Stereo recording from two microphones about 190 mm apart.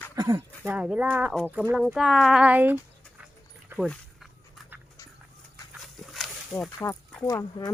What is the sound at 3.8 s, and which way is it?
Dog, centre (ahead or behind).